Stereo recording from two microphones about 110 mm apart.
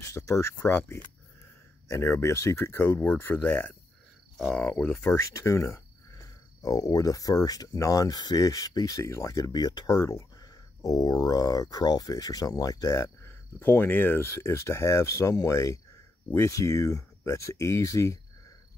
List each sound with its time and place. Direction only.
0.0 s speech: 30° left (ahead or behind); by 4.9 s 10° left (ahead or behind)
4.9 s speech: 25° left (ahead or behind)